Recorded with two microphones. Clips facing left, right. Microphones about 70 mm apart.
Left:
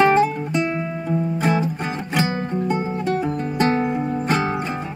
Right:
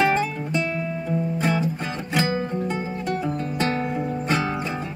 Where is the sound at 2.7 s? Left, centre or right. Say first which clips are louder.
Left 5 dB; left.